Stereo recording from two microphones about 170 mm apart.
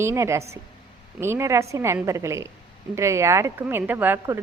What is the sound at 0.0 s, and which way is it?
A woman's voice, 15° right (ahead or behind).